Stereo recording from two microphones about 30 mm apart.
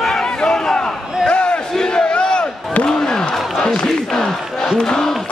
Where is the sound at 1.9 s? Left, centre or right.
Left.